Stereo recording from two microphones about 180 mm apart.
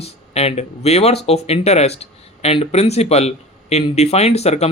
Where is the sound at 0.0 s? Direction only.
35° left (ahead or behind).